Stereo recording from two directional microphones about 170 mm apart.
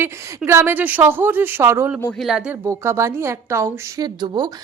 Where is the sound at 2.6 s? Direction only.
15° right (ahead or behind).